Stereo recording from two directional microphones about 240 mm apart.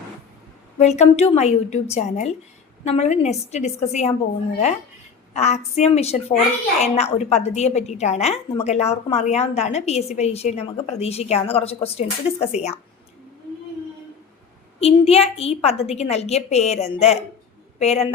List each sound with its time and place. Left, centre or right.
0.8 s a woman's voice: left
5.3 s a woman's voice: left
14.8 s a woman's voice: left